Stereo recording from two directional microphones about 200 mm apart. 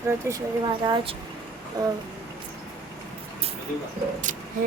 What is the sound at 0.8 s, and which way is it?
Speech, 25° right (ahead or behind).